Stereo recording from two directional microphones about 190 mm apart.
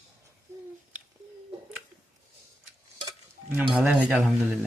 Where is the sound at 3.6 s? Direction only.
5° right (ahead or behind).